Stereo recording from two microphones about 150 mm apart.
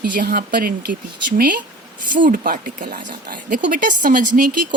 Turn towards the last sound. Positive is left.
turn(degrees=-65)  # may be behind; listen again after turning